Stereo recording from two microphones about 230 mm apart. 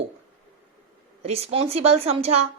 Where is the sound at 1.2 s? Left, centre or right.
Right.